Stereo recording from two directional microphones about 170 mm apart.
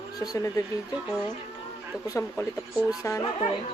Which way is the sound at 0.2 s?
20° left (ahead or behind).